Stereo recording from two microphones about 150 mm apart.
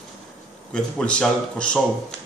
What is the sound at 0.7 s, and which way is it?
Speech, 5° left (ahead or behind).